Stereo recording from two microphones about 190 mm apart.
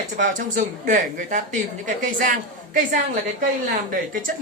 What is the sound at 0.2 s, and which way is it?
A woman's voice, 45° right (ahead or behind).